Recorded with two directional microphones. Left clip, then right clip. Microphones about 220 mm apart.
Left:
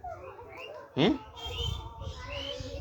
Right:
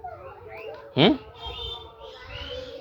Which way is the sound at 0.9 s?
20° right (ahead or behind).